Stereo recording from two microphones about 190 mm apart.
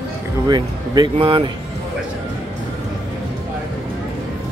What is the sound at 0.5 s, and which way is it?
Speech, 20° right (ahead or behind).